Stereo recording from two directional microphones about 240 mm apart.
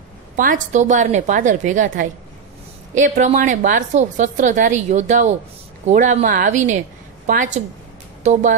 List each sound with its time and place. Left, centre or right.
0.4 s a woman's voice: right